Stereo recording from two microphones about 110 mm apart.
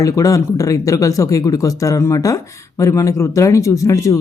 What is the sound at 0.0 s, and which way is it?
Speech, 30° left (ahead or behind).